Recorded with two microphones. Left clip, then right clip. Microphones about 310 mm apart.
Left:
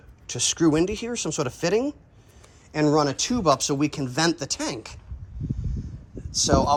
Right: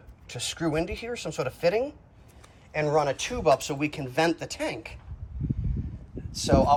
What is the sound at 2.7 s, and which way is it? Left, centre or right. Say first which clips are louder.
Speech: left 3 dB; left.